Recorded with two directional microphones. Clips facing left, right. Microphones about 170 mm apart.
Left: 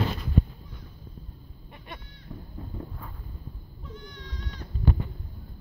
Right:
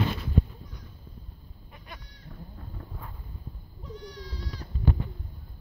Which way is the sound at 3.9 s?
35° right (ahead or behind).